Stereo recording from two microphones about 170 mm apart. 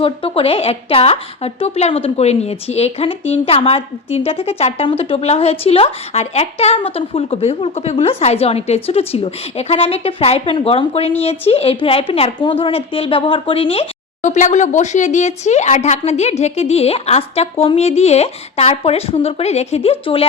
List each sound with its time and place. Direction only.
0.0 s a woman's voice: 30° left (ahead or behind)